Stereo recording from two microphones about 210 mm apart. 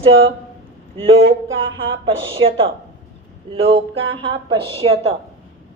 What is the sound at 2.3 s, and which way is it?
Speech, 25° right (ahead or behind).